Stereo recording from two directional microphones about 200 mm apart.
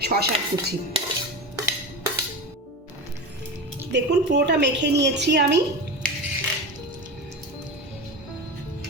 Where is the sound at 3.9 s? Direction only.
60° right (ahead or behind).